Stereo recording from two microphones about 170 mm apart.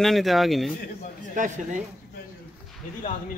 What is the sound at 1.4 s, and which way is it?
Speech, 50° right (ahead or behind).